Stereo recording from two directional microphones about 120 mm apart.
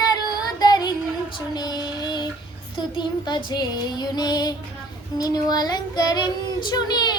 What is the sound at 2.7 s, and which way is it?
Child singing, 40° left (ahead or behind).